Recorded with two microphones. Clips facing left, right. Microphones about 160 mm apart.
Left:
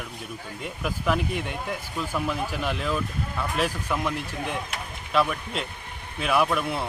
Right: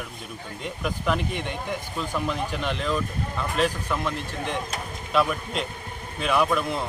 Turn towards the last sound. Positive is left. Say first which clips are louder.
# right 1 dB
turn(degrees=5)  # may be behind; listen again after turning